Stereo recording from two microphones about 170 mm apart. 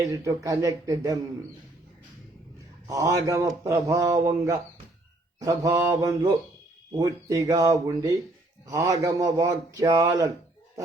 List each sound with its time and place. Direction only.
0.0 s a man's voice: 20° right (ahead or behind)
2.8 s a man's voice: 20° right (ahead or behind)